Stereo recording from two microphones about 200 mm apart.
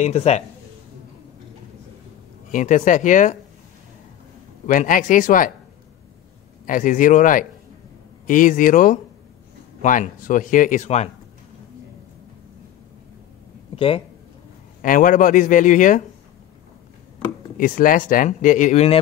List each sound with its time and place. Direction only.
0.0 s speech: 35° left (ahead or behind)
2.5 s speech: 40° left (ahead or behind)
4.6 s speech: 40° left (ahead or behind)
6.6 s speech: 40° left (ahead or behind)
13.7 s speech: 25° left (ahead or behind)
14.8 s speech: 45° left (ahead or behind)
17.6 s speech: 45° left (ahead or behind)